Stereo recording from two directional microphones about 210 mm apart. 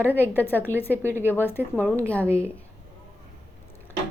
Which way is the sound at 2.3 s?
10° right (ahead or behind).